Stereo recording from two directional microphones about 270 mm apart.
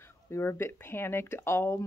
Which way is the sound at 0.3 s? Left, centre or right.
Centre.